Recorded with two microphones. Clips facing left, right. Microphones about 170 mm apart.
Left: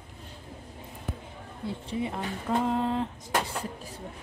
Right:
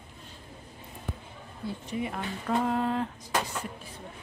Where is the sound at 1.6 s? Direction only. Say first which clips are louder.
Left 1 dB; 25° left (ahead or behind).